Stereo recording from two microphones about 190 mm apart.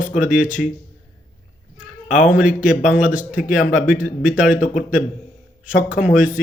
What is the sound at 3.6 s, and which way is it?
Speech, 45° left (ahead or behind).